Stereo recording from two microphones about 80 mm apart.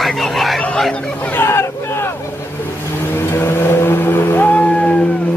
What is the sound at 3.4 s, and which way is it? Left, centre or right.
Vehicle, left.